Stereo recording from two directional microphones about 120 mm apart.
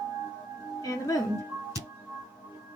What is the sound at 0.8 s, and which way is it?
Speech, 30° left (ahead or behind).